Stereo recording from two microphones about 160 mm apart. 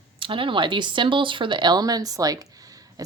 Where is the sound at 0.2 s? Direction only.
30° right (ahead or behind).